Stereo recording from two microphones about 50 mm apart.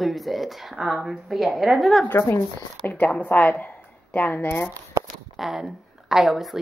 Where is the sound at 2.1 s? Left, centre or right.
Left.